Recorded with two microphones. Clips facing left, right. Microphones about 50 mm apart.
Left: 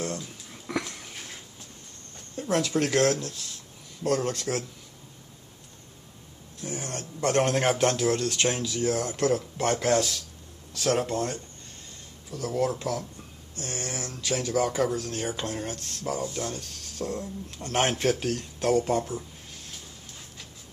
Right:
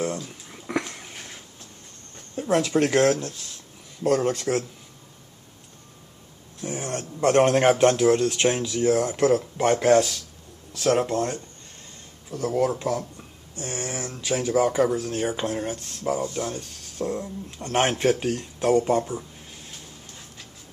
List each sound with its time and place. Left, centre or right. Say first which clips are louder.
0.5 s a sound: right 3 dB; centre
2.3 s speech: right 4 dB; centre
6.6 s speech: right 5 dB; centre
11.1 s speech: right 4 dB; centre
12.5 s speech: right 3 dB; centre